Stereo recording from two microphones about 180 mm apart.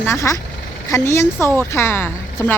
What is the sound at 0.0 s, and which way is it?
Speech, 15° left (ahead or behind).